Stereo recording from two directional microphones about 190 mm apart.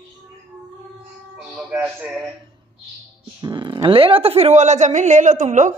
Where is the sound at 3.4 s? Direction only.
20° right (ahead or behind); by 5.7 s 40° right (ahead or behind).